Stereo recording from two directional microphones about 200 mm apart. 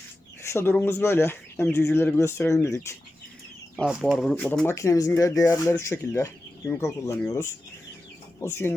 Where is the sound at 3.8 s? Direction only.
Centre (ahead or behind).